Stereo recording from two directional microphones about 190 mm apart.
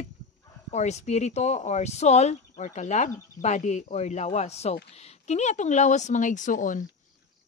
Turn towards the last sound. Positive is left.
turn(degrees=45)  # may be behind; listen again after turning